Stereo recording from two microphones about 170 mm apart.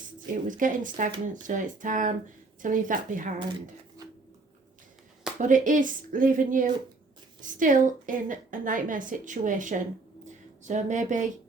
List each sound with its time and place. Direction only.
0.4 s a woman's voice: 50° right (ahead or behind)
5.4 s a woman's voice: 50° right (ahead or behind)